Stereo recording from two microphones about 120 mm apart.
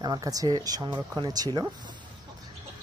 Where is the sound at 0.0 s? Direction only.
30° right (ahead or behind).